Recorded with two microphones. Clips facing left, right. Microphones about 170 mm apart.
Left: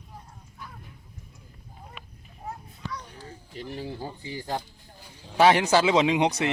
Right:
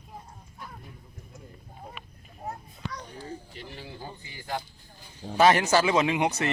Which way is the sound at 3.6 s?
40° left (ahead or behind).